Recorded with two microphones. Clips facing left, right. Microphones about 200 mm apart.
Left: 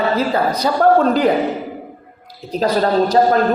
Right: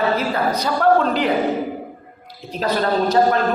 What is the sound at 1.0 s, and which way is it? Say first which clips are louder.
Speech: left 5 dB; 45° left (ahead or behind).